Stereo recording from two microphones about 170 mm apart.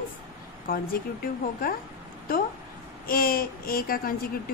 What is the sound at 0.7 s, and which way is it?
Speech, 60° left (ahead or behind).